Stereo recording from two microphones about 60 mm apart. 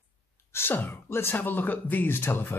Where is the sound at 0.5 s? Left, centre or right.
Left.